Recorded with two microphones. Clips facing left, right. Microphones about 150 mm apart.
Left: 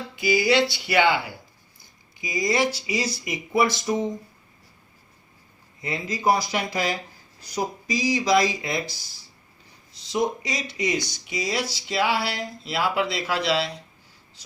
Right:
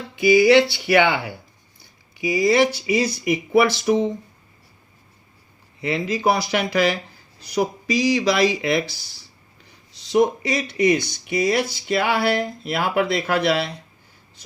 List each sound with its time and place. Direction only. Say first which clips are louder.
0.2 s speech: right 7 dB; 60° right (ahead or behind)
2.1 s speech: right 7 dB; 70° right (ahead or behind)
5.8 s speech: right 4 dB; 70° right (ahead or behind)
10.0 s speech: right 7 dB; 60° right (ahead or behind)